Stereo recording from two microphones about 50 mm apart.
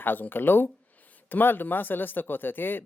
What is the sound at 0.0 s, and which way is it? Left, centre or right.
Speech, left.